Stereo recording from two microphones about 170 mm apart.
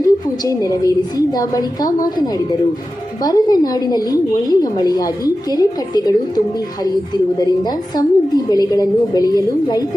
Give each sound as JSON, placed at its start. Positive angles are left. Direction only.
{"t": 0.0, "sound": "a woman's voice", "side_deg": 20}